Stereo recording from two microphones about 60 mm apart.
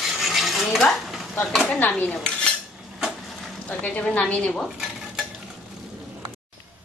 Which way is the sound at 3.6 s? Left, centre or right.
Left.